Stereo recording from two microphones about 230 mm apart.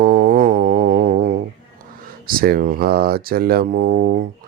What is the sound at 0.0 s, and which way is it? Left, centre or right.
Music, right.